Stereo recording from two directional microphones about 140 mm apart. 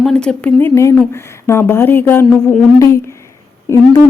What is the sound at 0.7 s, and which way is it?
A woman's voice, 20° left (ahead or behind).